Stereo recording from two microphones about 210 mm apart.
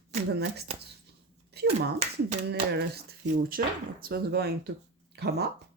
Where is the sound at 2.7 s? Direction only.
50° right (ahead or behind).